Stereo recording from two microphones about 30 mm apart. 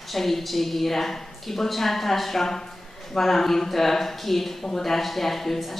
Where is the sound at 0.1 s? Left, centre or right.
Centre.